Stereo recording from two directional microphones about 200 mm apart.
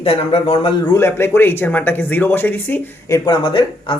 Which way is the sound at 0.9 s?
10° left (ahead or behind).